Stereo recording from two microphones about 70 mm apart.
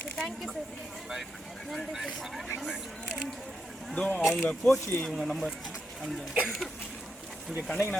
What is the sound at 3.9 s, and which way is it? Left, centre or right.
Speech, centre.